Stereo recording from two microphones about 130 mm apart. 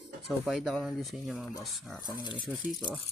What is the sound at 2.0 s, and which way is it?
Speech, 35° left (ahead or behind).